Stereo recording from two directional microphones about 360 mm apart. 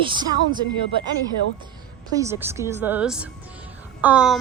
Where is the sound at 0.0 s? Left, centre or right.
Centre.